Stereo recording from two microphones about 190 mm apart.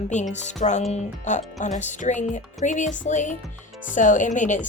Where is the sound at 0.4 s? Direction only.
40° left (ahead or behind).